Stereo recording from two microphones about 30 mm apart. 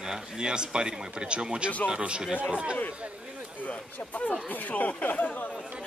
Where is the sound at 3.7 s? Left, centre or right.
Left.